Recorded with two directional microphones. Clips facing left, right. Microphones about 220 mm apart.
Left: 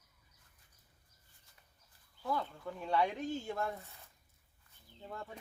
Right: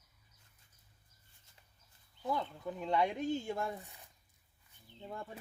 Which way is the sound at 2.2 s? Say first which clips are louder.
Right 1 dB; 20° right (ahead or behind).